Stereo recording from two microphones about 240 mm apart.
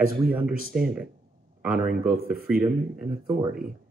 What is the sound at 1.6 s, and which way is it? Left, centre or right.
Speech, centre.